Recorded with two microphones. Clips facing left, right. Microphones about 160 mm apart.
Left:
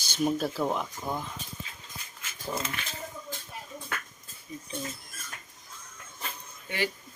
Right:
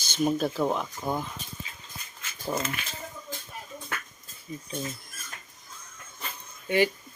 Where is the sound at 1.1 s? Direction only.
20° right (ahead or behind).